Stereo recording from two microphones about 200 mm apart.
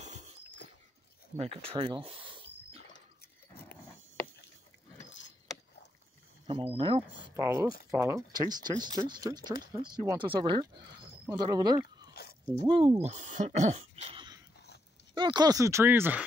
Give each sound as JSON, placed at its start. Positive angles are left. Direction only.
{"t": 0.0, "sound": "a sound", "side_deg": -35}
{"t": 1.3, "sound": "speech", "side_deg": -30}
{"t": 2.1, "sound": "a sound", "side_deg": -25}
{"t": 3.2, "sound": "a sound", "side_deg": 50}
{"t": 6.4, "sound": "speech", "side_deg": -25}
{"t": 12.1, "sound": "biting", "side_deg": 55}
{"t": 12.6, "sound": "speech", "side_deg": -25}
{"t": 14.1, "sound": "dog", "side_deg": -20}
{"t": 15.1, "sound": "speech", "side_deg": -20}